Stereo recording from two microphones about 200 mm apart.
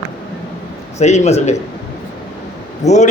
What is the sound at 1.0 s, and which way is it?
Speech, 35° left (ahead or behind).